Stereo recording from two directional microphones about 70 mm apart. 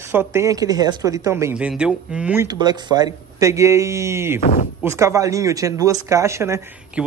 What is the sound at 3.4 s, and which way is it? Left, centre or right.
Speech, right.